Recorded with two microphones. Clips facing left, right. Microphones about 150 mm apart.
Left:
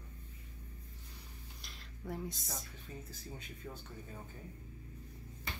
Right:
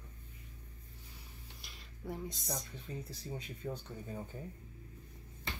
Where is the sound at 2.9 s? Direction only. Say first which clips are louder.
Right 5 dB; 25° right (ahead or behind).